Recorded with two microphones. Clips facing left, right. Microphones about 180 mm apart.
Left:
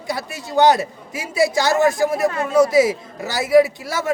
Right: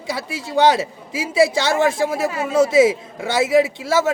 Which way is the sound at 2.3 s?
5° right (ahead or behind).